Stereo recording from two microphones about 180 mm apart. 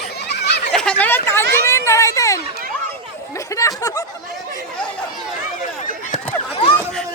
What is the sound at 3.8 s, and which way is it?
Chatter, 20° left (ahead or behind).